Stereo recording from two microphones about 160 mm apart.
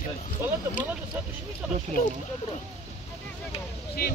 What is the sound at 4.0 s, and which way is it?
Speech, 70° left (ahead or behind).